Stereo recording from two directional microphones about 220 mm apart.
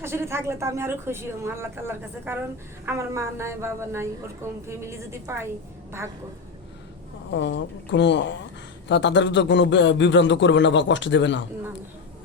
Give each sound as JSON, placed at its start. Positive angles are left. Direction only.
{"t": 0.0, "sound": "speech", "side_deg": -10}
{"t": 7.3, "sound": "a woman's voice", "side_deg": 55}